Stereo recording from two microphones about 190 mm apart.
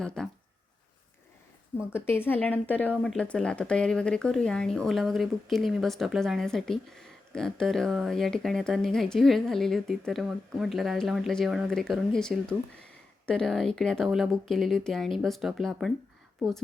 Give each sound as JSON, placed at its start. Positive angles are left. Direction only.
{"t": 0.0, "sound": "speech", "side_deg": 5}
{"t": 1.9, "sound": "speech", "side_deg": 10}